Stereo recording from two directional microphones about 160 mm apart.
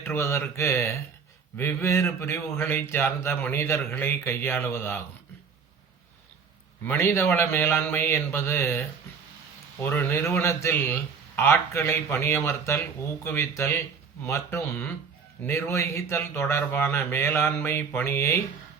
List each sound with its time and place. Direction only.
0.1 s speech: 15° left (ahead or behind)
6.8 s speech: 15° left (ahead or behind)
9.8 s speech: 15° left (ahead or behind)